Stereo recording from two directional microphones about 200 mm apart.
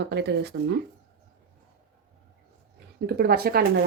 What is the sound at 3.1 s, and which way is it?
Speech, 50° right (ahead or behind).